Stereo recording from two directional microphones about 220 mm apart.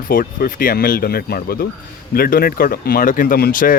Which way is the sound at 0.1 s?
40° left (ahead or behind).